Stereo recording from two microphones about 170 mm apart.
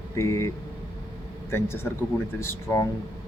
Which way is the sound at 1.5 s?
15° left (ahead or behind).